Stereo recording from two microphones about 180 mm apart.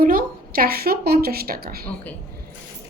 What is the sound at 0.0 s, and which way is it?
A woman's voice, 55° right (ahead or behind).